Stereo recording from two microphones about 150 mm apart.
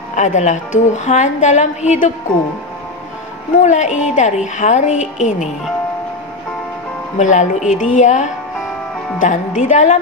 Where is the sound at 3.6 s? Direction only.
50° left (ahead or behind).